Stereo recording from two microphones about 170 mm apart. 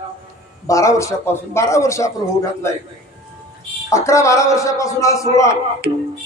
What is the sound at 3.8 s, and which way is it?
A man's voice, 15° left (ahead or behind).